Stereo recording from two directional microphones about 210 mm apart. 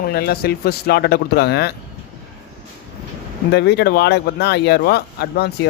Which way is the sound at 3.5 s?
50° left (ahead or behind).